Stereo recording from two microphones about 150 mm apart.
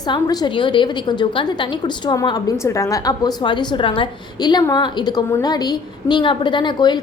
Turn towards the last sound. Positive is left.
turn(degrees=30)  # may be behind; listen again after turning